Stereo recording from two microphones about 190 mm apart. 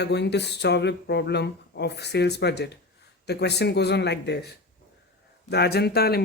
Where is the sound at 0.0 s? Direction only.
65° left (ahead or behind).